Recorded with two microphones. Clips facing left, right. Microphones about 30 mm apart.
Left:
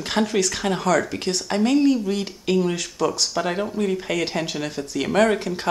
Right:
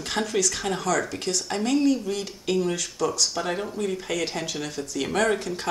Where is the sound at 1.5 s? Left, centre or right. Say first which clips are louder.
Left 4 dB; left.